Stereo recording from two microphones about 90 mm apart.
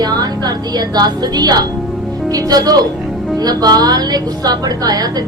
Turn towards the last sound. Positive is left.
turn(degrees=-45)  # may be behind; listen again after turning